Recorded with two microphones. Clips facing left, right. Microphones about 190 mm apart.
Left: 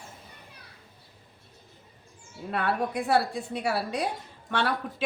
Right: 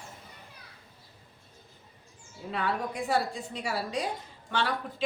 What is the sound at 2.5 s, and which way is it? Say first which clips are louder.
A woman's voice: left 4 dB; 60° left (ahead or behind).